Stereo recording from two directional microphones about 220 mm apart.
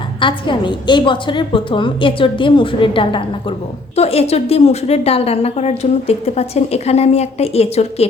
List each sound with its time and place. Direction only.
0.2 s a woman's voice: 20° left (ahead or behind)